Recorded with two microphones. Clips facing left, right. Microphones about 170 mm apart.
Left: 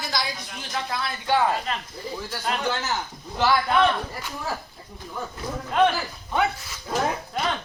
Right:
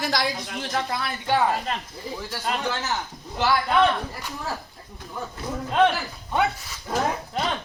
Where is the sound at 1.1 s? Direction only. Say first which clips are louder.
Even; 20° right (ahead or behind).